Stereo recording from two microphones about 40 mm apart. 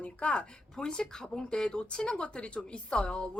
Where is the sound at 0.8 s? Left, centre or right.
Centre.